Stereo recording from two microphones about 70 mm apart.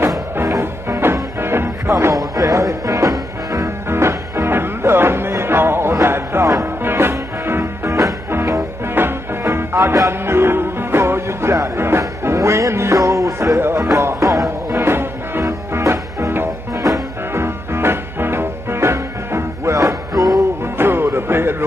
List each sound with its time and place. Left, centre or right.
0.5 s music: right
2.1 s music: right
14.8 s music: right
17.3 s music: right
20.7 s music: right